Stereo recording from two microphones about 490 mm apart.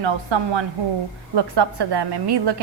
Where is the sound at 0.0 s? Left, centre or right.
Right.